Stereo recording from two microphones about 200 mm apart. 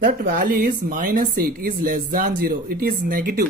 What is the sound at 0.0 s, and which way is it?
Speech, 45° right (ahead or behind).